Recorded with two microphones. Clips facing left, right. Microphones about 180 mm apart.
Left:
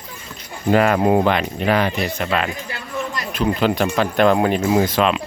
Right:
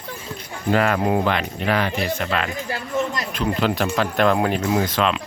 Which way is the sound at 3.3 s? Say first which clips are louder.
Left 5 dB; 5° left (ahead or behind).